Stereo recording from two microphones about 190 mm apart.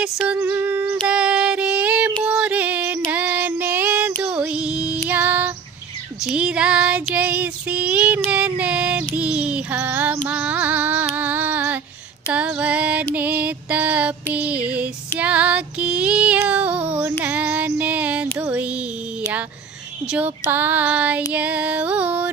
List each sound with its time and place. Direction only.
0.0 s female singing: 5° right (ahead or behind)
6.2 s child singing: 5° right (ahead or behind)
12.3 s female singing: 5° right (ahead or behind)
20.1 s child singing: 10° right (ahead or behind)